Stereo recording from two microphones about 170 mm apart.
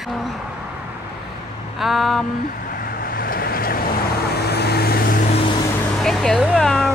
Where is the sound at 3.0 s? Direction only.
60° left (ahead or behind).